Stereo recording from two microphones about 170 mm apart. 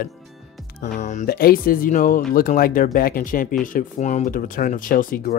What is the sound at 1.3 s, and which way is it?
Speech, 60° left (ahead or behind).